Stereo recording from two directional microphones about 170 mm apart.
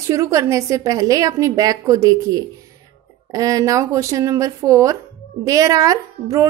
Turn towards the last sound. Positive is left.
turn(degrees=-20)  # may be behind; listen again after turning